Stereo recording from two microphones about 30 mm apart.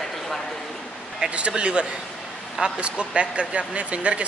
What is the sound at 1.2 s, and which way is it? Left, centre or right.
Speech, right.